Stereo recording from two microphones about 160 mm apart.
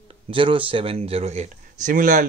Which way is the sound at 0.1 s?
35° right (ahead or behind).